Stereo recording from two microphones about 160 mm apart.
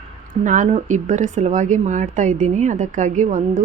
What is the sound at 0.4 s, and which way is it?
Speech, 50° right (ahead or behind).